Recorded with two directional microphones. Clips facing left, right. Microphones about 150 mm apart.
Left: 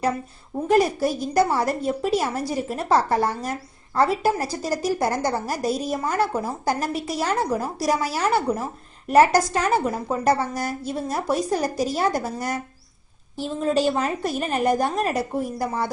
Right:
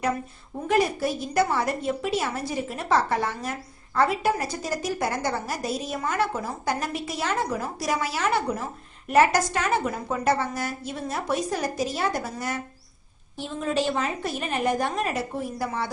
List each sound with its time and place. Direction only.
0.7 s a woman's voice: 40° left (ahead or behind)